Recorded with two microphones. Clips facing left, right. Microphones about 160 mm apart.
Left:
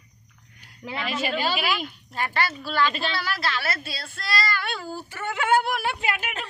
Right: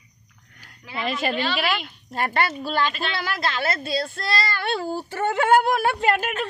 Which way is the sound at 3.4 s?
20° right (ahead or behind).